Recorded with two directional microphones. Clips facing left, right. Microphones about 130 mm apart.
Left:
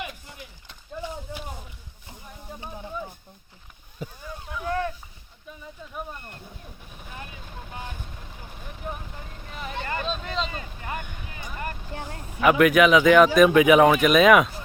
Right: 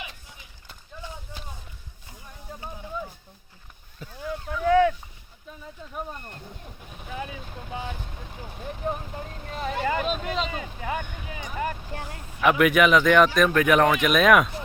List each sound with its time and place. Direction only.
4.0 s speech: 15° left (ahead or behind)
4.7 s a sound: 90° right
8.8 s vehicle: 35° right (ahead or behind)
9.7 s vehicle: 10° right (ahead or behind)
11.9 s vehicle: 25° left (ahead or behind)
12.4 s a man's voice: centre (ahead or behind)